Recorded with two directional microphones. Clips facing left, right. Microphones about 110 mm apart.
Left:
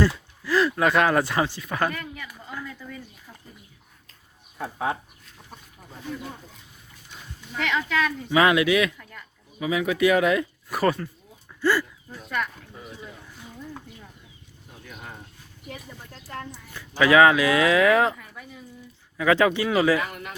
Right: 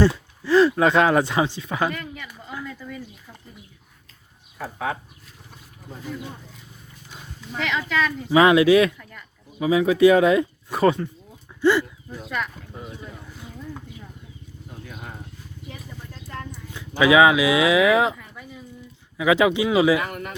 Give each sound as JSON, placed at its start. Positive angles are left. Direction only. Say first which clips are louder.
{"t": 0.0, "sound": "speech", "louder": "right 4 dB", "side_deg": -30}
{"t": 2.6, "sound": "a sound", "louder": "right 3 dB", "side_deg": 5}
{"t": 7.6, "sound": "speech", "louder": "right 1 dB", "side_deg": 0}
{"t": 8.3, "sound": "speech", "louder": "right 5 dB", "side_deg": -25}
{"t": 14.8, "sound": "a sound", "louder": "right 1 dB", "side_deg": -20}
{"t": 16.7, "sound": "speech", "louder": "right 1 dB", "side_deg": -15}
{"t": 20.1, "sound": "speech", "louder": "right 4 dB", "side_deg": -45}